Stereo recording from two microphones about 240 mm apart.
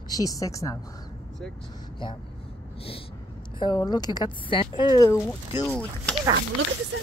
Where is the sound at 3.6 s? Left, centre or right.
Centre.